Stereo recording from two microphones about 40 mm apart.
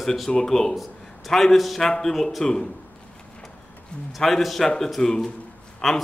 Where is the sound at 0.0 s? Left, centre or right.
Centre.